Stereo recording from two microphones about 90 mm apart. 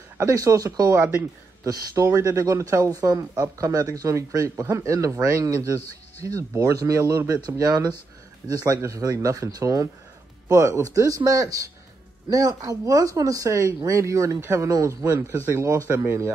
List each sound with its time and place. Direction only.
0.3 s speech: 40° right (ahead or behind)
0.9 s speech: 20° right (ahead or behind)
1.6 s speech: 40° right (ahead or behind)
14.7 s speech: 40° right (ahead or behind)
15.3 s speech: 25° right (ahead or behind)
15.6 s speech: 35° right (ahead or behind)